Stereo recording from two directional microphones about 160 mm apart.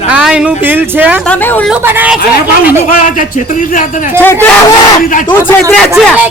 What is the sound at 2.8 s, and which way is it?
Speech, 55° left (ahead or behind).